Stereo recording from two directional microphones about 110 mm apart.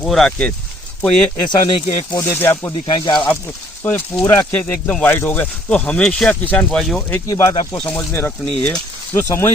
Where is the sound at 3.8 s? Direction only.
15° left (ahead or behind); by 7.0 s centre (ahead or behind).